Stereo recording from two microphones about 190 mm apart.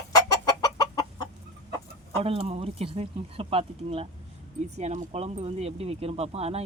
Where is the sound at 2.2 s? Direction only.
30° right (ahead or behind).